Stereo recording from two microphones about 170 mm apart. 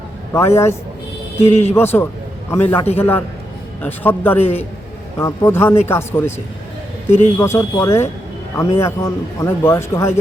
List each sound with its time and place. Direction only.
0.3 s a man's voice: 15° left (ahead or behind)
2.7 s a man's voice: 40° left (ahead or behind)
3.0 s a man's voice: 10° left (ahead or behind)